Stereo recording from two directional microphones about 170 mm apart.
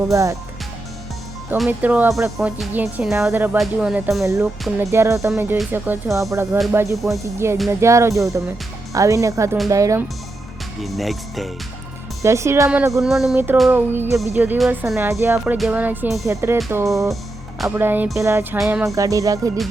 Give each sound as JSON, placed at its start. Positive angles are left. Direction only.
{"t": 0.1, "sound": "speech", "side_deg": -20}
{"t": 1.5, "sound": "speech", "side_deg": -5}
{"t": 10.8, "sound": "speech", "side_deg": 0}
{"t": 12.2, "sound": "speech", "side_deg": -15}
{"t": 12.9, "sound": "speech", "side_deg": 0}
{"t": 13.3, "sound": "speech", "side_deg": -10}
{"t": 18.6, "sound": "speech", "side_deg": -5}